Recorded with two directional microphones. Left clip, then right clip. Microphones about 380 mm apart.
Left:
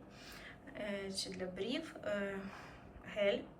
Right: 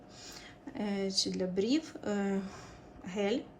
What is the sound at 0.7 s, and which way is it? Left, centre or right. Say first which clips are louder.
A woman's voice: right 7 dB; centre.